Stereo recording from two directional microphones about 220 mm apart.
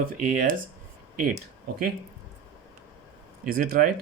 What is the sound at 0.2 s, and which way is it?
Speech, 40° right (ahead or behind).